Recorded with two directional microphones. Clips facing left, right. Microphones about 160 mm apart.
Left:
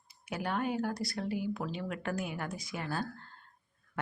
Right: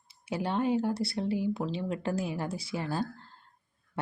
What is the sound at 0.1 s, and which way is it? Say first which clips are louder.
A woman's voice: right 4 dB; 30° right (ahead or behind).